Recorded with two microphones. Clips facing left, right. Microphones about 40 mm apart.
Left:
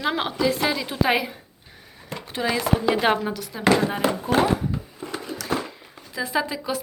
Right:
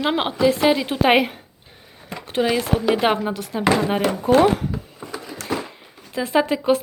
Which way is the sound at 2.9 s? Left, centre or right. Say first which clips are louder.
Right 3 dB; centre.